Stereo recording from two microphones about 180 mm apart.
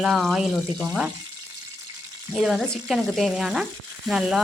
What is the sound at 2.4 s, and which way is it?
Speech, centre (ahead or behind).